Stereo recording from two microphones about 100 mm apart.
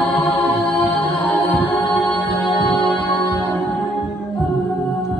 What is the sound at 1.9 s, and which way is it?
Music, 20° left (ahead or behind).